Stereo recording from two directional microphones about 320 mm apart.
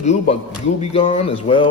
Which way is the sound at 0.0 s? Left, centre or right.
Centre.